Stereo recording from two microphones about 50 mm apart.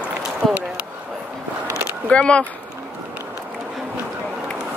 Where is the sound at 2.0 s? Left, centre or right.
Left.